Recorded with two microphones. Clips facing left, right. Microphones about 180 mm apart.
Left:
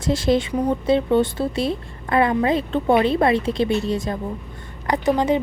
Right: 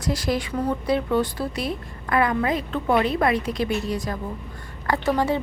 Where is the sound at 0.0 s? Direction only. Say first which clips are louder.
Left 6 dB; 25° left (ahead or behind).